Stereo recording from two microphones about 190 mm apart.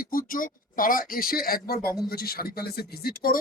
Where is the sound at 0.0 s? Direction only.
50° left (ahead or behind).